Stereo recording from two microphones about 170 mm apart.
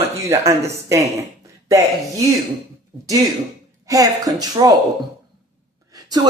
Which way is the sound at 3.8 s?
20° right (ahead or behind).